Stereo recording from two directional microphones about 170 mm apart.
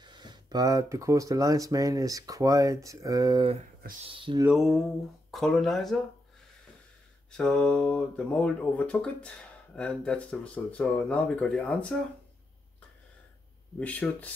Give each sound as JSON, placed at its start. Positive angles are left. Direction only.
{"t": 0.0, "sound": "speech", "side_deg": -25}
{"t": 4.5, "sound": "speech", "side_deg": -5}
{"t": 7.2, "sound": "speech", "side_deg": 5}
{"t": 13.7, "sound": "speech", "side_deg": 10}